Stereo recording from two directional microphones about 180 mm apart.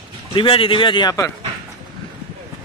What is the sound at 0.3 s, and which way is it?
A man's voice, 30° left (ahead or behind).